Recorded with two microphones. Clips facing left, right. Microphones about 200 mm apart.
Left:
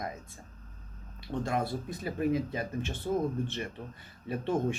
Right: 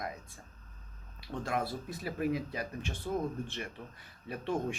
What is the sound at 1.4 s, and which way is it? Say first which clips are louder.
Speech: left 2 dB; centre (ahead or behind).